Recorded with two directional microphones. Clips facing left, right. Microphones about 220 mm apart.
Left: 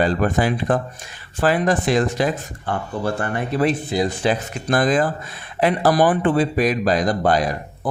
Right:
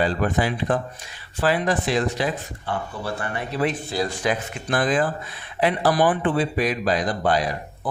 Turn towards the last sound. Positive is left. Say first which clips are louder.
# left 4 dB
turn(degrees=45)  # may be behind; listen again after turning